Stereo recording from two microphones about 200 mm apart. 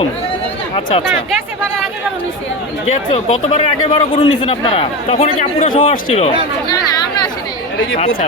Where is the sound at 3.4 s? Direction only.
30° left (ahead or behind).